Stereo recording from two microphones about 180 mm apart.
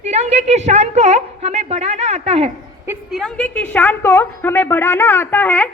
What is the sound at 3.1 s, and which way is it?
A woman's voice, centre (ahead or behind).